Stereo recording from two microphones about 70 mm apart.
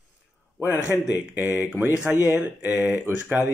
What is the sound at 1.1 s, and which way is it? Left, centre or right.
Mantra, right.